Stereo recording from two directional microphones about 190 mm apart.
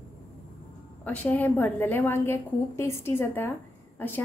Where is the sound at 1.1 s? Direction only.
10° left (ahead or behind).